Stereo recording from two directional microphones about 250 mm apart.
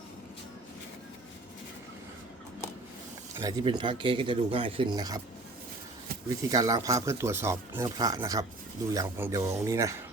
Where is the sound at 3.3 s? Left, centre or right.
Centre.